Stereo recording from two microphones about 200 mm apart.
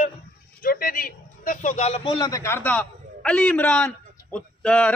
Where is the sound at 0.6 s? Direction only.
45° left (ahead or behind); by 2.1 s 30° left (ahead or behind).